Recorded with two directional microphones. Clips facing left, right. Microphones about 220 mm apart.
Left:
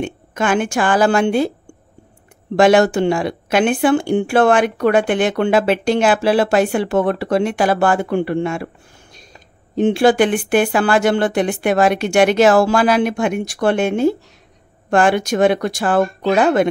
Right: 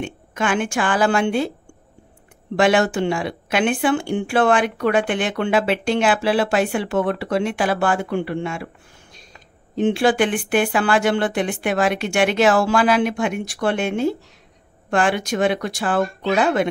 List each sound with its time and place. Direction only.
0.0 s speech: 40° left (ahead or behind)
2.5 s speech: 40° left (ahead or behind)
9.8 s speech: 40° left (ahead or behind)